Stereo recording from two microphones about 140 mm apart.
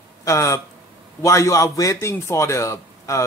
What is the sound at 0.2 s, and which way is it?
A man's voice, 20° left (ahead or behind).